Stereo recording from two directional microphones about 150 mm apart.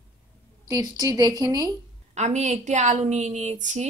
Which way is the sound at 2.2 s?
50° right (ahead or behind).